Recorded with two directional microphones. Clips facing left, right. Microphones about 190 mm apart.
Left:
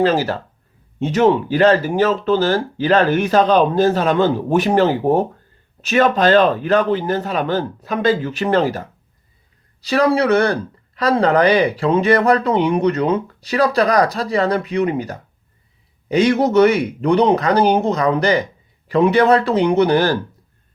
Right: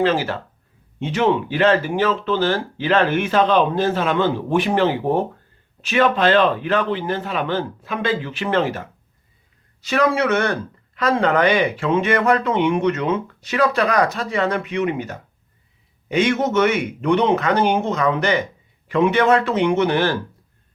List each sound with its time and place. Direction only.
0.0 s speech: 40° left (ahead or behind)